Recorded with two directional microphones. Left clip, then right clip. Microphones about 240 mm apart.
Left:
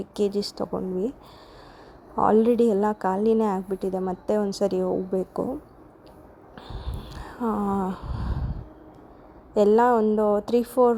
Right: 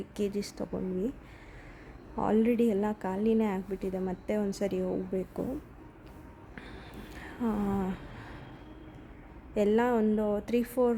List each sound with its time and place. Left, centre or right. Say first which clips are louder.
0.0 s a woman's voice: left 8 dB; centre
2.4 s a woman's voice: left 8 dB; centre
7.4 s a woman's voice: left 7 dB; centre
9.6 s a woman's voice: left 8 dB; centre